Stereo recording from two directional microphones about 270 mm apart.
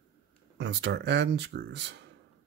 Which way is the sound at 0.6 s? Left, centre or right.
Right.